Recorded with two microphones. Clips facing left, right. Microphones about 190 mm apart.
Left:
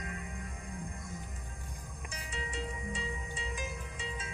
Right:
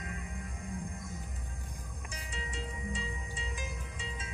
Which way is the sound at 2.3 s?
60° left (ahead or behind).